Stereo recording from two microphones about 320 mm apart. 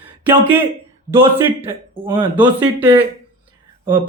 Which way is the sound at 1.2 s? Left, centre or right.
Centre.